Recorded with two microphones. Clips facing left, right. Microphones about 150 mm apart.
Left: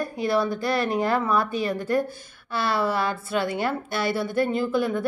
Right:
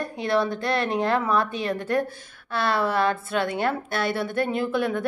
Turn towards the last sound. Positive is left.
turn(degrees=0)  # may be behind; listen again after turning